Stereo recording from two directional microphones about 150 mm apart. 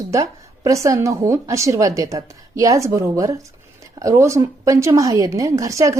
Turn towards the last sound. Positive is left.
turn(degrees=-20)  # may be behind; listen again after turning